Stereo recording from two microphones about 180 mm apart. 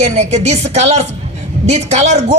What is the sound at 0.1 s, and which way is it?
A woman's voice, 40° right (ahead or behind).